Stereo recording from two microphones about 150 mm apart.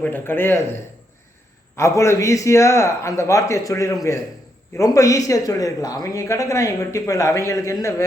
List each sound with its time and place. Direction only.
0.0 s a man's voice: 15° left (ahead or behind)